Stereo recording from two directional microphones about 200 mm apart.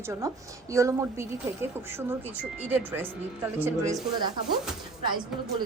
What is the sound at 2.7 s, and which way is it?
A woman's voice, 10° right (ahead or behind).